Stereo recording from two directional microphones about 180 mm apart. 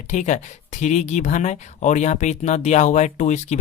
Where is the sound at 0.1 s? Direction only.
40° left (ahead or behind).